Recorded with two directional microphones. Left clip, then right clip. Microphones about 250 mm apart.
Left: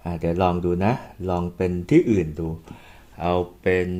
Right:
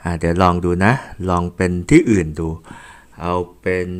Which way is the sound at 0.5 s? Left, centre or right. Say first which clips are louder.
Right 4 dB; right.